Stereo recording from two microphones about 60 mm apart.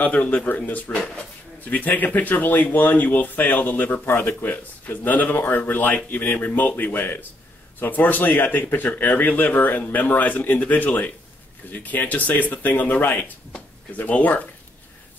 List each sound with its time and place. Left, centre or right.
0.0 s speech: left
0.9 s speech: centre
1.6 s speech: left